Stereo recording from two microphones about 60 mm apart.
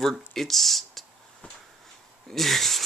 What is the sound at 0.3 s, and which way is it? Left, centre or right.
Speech, centre.